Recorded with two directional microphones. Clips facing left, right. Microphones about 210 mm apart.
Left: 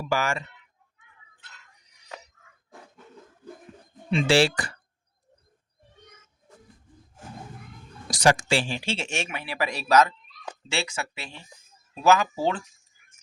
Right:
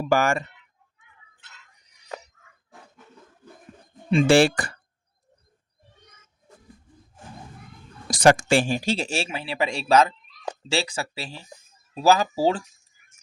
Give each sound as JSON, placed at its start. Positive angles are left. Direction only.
{"t": 0.0, "sound": "speech", "side_deg": -50}
{"t": 4.1, "sound": "speech", "side_deg": -50}
{"t": 8.1, "sound": "speech", "side_deg": -50}